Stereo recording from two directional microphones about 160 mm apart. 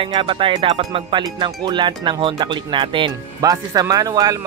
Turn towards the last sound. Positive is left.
turn(degrees=-20)  # may be behind; listen again after turning